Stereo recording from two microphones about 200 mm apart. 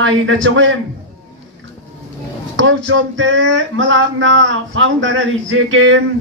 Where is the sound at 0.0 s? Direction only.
70° right (ahead or behind).